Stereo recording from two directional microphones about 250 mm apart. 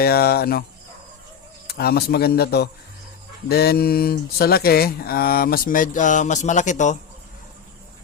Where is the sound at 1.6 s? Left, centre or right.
Left.